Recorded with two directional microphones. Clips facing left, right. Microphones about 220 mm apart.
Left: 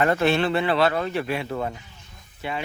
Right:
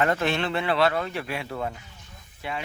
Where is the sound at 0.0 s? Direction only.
35° left (ahead or behind).